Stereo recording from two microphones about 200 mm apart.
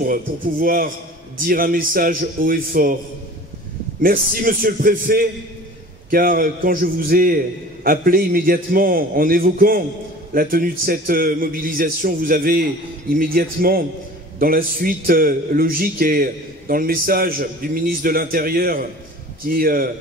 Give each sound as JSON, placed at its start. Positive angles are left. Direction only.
{"t": 0.0, "sound": "a man's voice", "side_deg": -45}
{"t": 4.0, "sound": "a man's voice", "side_deg": -45}